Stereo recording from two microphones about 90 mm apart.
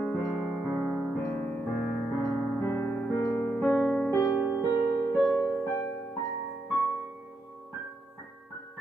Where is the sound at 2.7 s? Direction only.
20° left (ahead or behind).